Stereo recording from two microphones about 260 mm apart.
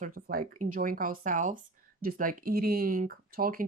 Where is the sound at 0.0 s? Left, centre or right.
Right.